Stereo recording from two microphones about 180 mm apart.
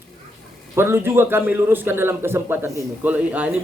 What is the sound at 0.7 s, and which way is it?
A man's voice, 15° right (ahead or behind).